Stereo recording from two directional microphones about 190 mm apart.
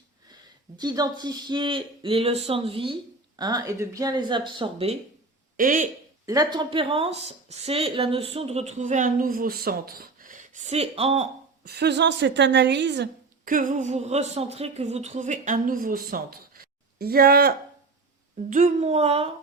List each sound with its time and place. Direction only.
0.8 s speech: 20° right (ahead or behind)
5.5 s speech: 45° right (ahead or behind)
6.2 s a woman's voice: 20° right (ahead or behind)
11.6 s a woman's voice: 60° right (ahead or behind)
13.4 s a woman's voice: 45° right (ahead or behind)
18.3 s a woman's voice: 40° right (ahead or behind)